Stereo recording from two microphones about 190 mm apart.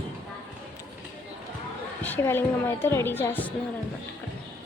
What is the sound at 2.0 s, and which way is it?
A woman's voice, 10° left (ahead or behind).